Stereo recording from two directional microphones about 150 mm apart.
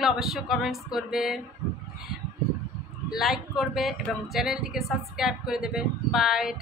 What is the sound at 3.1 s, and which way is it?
Speech, centre (ahead or behind).